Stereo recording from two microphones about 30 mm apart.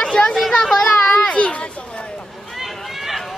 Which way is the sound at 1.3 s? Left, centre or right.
Left.